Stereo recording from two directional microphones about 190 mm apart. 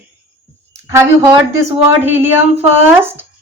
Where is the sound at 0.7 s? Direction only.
15° right (ahead or behind).